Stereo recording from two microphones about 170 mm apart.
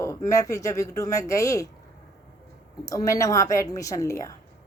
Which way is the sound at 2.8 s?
20° left (ahead or behind).